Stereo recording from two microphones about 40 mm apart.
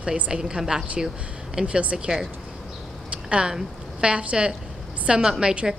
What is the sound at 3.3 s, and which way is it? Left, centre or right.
A woman's voice, right.